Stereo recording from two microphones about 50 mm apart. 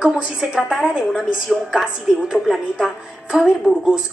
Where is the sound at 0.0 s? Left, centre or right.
Centre.